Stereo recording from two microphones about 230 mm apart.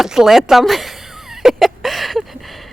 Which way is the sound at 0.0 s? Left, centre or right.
Centre.